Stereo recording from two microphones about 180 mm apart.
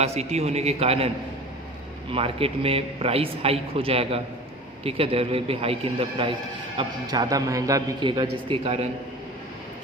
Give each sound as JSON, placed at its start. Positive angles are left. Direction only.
{"t": 0.0, "sound": "a man's voice", "side_deg": -35}